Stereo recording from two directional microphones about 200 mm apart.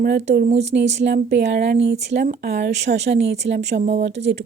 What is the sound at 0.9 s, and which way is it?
Speech, 60° right (ahead or behind).